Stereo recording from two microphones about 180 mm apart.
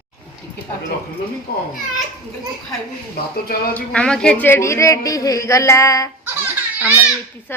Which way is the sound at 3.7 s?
5° left (ahead or behind).